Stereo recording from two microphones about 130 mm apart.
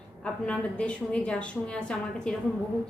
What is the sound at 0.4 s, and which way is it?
A woman's voice, 10° left (ahead or behind).